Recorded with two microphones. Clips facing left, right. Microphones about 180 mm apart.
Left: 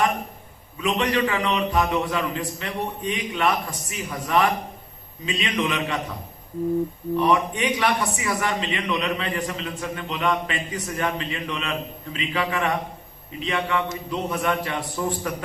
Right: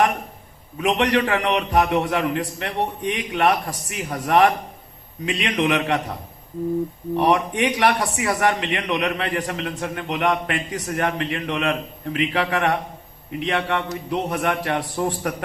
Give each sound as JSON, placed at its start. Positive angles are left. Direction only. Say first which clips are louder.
{"t": 0.8, "sound": "a man's voice", "louder": "right 3 dB", "side_deg": -65}
{"t": 7.2, "sound": "a man's voice", "louder": "right 2 dB", "side_deg": -65}